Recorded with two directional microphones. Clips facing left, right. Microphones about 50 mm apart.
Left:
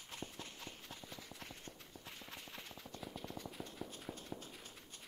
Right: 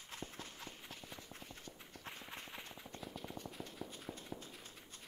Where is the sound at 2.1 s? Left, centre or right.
Right.